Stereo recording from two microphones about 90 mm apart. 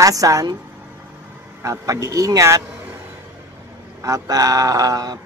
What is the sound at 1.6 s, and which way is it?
Speech, 35° right (ahead or behind).